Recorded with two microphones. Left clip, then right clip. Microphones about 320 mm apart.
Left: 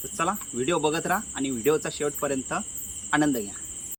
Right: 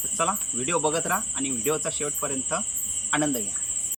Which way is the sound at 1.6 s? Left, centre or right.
Centre.